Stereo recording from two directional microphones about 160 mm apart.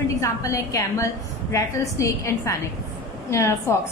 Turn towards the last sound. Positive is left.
turn(degrees=15)  # may be behind; listen again after turning